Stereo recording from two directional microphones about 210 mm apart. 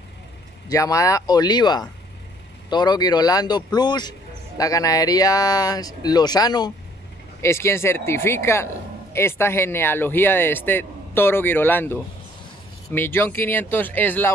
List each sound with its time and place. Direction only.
0.7 s speech: 15° left (ahead or behind)